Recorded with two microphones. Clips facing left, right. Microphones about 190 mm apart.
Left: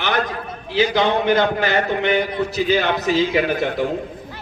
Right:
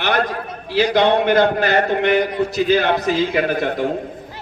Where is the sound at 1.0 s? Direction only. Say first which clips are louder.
Right 4 dB; 60° right (ahead or behind).